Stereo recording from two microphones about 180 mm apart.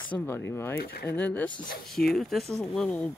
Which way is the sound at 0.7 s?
55° left (ahead or behind).